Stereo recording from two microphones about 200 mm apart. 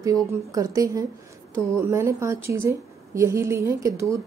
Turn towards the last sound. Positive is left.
turn(degrees=-15)  # may be behind; listen again after turning